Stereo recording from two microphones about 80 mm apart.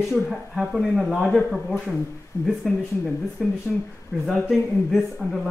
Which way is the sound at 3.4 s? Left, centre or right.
Centre.